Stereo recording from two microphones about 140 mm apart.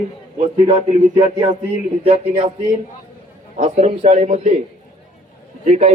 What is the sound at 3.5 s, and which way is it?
A man's voice, 60° right (ahead or behind).